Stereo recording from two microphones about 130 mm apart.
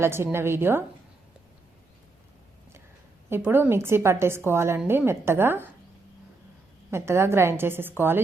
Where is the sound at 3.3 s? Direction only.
15° right (ahead or behind).